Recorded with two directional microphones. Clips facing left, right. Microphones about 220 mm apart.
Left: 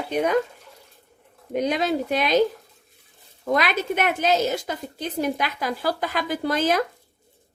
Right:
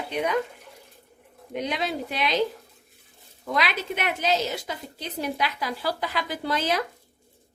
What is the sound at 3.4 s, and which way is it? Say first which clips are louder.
A woman's voice: left 5 dB; 50° left (ahead or behind).